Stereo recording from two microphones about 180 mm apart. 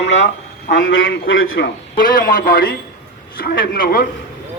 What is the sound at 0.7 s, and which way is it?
A man's voice, 90° left.